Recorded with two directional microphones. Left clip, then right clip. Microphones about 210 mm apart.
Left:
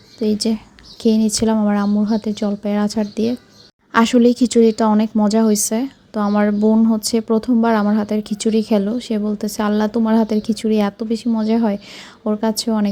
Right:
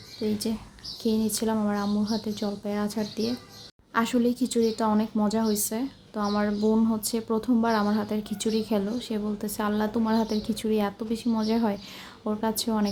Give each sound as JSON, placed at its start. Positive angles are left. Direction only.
{"t": 0.2, "sound": "a woman's voice", "side_deg": 30}